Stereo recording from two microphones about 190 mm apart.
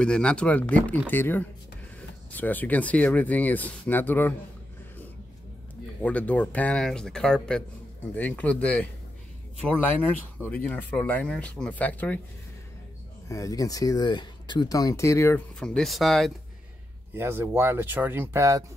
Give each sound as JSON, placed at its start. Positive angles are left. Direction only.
{"t": 0.0, "sound": "speech", "side_deg": 5}
{"t": 6.0, "sound": "speech", "side_deg": 5}
{"t": 10.4, "sound": "speech", "side_deg": 10}
{"t": 13.3, "sound": "speech", "side_deg": 15}
{"t": 17.1, "sound": "speech", "side_deg": -10}